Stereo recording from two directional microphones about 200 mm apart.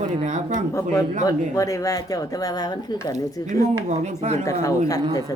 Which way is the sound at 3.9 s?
35° right (ahead or behind).